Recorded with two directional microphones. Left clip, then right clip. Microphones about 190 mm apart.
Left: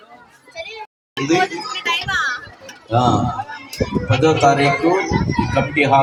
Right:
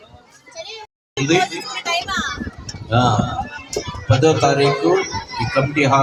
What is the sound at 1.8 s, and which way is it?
Music, 60° right (ahead or behind).